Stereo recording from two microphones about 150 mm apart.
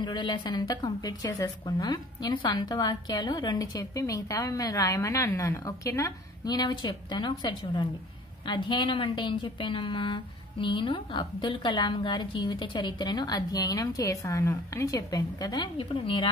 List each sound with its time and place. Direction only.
0.0 s a woman's voice: 30° left (ahead or behind)